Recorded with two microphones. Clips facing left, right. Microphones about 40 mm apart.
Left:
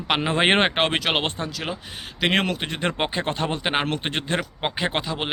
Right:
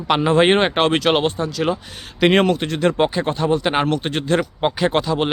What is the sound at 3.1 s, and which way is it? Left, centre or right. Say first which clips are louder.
Speech: right 6 dB; left.